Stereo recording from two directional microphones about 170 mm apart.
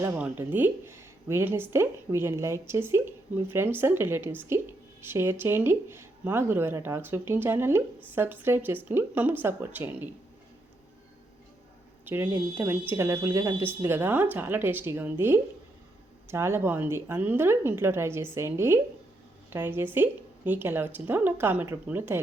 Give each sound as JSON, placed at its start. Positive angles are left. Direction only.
{"t": 0.0, "sound": "a woman's voice", "side_deg": -10}
{"t": 12.0, "sound": "a woman's voice", "side_deg": -10}